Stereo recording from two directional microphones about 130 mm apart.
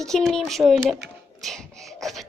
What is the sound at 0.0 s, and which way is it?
A child's voice, 5° left (ahead or behind).